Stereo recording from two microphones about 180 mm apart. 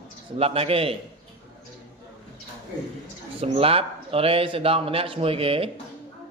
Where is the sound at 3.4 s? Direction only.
30° right (ahead or behind).